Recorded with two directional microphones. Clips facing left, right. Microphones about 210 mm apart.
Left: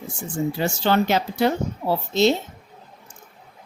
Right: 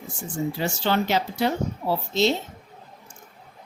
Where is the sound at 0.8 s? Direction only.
50° left (ahead or behind).